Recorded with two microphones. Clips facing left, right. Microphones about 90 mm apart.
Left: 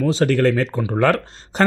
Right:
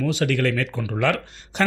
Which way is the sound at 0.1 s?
35° left (ahead or behind).